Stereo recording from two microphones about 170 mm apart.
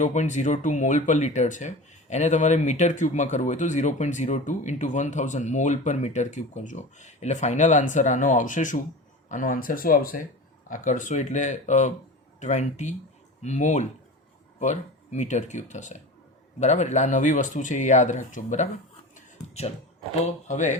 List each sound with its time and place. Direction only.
0.0 s speech: 45° left (ahead or behind)
19.1 s a sound: 40° left (ahead or behind)
20.2 s speech: 45° left (ahead or behind)